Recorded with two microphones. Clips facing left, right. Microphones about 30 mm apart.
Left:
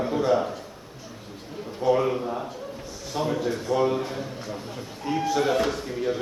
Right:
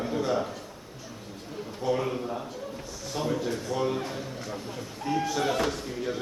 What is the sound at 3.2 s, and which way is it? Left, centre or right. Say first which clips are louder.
A man's voice: left 3 dB; centre.